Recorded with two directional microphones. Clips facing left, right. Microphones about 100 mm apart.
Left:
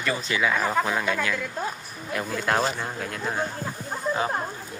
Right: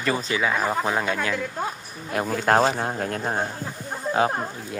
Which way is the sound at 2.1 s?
45° right (ahead or behind).